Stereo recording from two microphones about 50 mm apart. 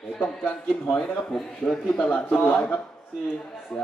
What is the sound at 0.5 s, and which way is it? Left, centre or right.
A man's voice, centre.